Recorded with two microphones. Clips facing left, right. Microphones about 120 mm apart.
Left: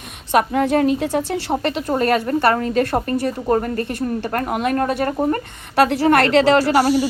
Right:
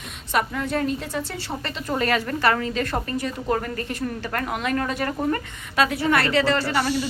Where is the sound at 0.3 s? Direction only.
60° left (ahead or behind).